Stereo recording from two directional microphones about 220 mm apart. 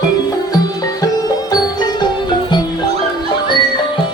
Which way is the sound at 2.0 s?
20° left (ahead or behind).